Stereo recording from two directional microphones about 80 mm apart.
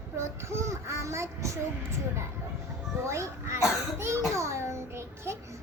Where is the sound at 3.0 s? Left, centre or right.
Right.